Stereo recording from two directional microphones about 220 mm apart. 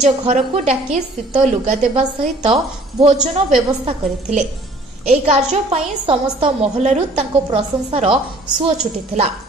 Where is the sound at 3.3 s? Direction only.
30° right (ahead or behind).